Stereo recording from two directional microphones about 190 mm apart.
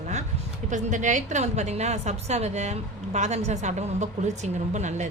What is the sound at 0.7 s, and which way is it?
A woman's voice, 40° right (ahead or behind).